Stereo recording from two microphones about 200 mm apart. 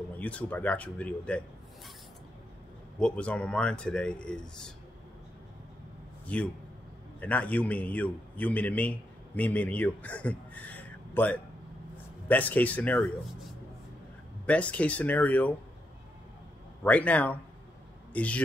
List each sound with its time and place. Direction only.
0.2 s speech: 5° left (ahead or behind)
3.0 s speech: 5° left (ahead or behind)
6.2 s a man's voice: 5° left (ahead or behind)
14.4 s speech: 5° left (ahead or behind)
16.8 s a man's voice: 5° left (ahead or behind)